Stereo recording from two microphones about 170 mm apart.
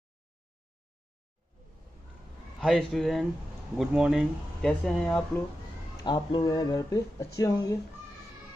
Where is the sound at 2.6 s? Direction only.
Centre (ahead or behind).